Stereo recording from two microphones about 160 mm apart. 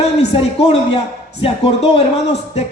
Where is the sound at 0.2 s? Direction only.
40° left (ahead or behind).